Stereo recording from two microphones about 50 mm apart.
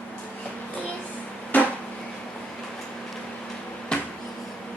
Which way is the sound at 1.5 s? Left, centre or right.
Left.